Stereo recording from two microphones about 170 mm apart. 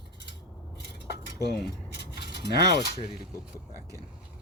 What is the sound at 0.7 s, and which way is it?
Cutlery, 75° left (ahead or behind).